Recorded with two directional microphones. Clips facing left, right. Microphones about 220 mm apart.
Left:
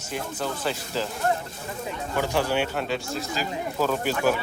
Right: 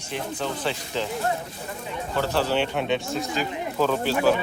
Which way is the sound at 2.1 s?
15° left (ahead or behind).